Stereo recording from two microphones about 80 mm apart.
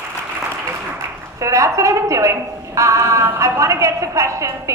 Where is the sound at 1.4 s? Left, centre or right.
Right.